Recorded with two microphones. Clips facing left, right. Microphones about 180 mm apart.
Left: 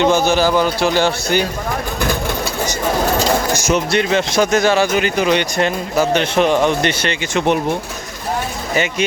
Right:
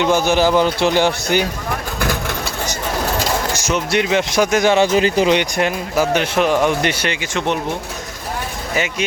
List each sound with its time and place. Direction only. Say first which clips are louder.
0.0 s speech: left 1 dB; 15° right (ahead or behind)
3.9 s speech: right 3 dB; 15° right (ahead or behind); by 5.3 s 30° right (ahead or behind)
5.3 s speech: even; 15° right (ahead or behind)
7.3 s speech: left 5 dB; 10° left (ahead or behind)
8.7 s speech: left 3 dB; centre (ahead or behind)